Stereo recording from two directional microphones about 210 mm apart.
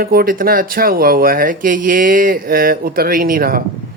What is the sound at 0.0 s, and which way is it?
Speech, 45° right (ahead or behind).